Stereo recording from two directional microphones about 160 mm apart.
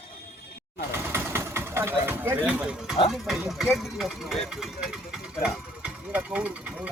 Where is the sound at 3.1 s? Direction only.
Centre (ahead or behind).